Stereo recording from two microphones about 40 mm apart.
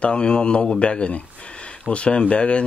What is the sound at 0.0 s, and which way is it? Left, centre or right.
Speech, left.